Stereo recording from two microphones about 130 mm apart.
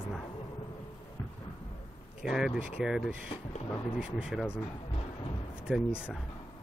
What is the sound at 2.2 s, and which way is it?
Speech, 5° right (ahead or behind).